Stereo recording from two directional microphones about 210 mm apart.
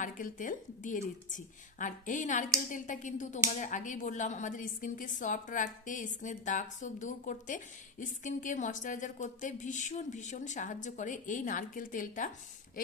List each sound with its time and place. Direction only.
0.0 s a woman's voice: 40° left (ahead or behind)